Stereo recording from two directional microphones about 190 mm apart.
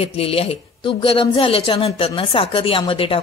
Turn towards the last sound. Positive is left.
turn(degrees=30)  # may be behind; listen again after turning